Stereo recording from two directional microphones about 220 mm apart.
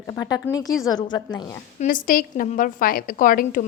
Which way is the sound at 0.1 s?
15° left (ahead or behind).